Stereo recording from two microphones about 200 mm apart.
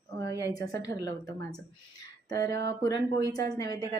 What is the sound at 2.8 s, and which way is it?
Speech, 20° left (ahead or behind).